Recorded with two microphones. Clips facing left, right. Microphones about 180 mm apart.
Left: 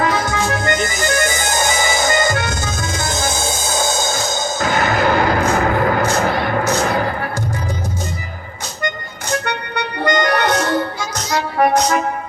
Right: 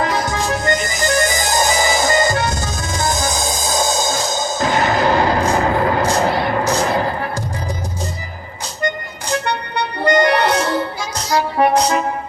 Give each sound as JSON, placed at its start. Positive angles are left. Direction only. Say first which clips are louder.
{"t": 0.0, "sound": "music", "louder": "left 1 dB", "side_deg": -35}
{"t": 9.5, "sound": "music", "louder": "right 1 dB", "side_deg": -30}